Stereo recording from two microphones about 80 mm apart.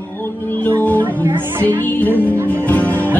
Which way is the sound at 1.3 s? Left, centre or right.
Right.